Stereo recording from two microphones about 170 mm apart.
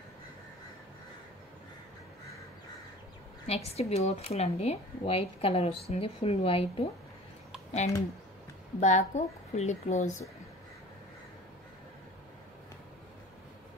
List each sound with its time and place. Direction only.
3.4 s speech: 35° left (ahead or behind)
8.7 s a woman's voice: 45° left (ahead or behind)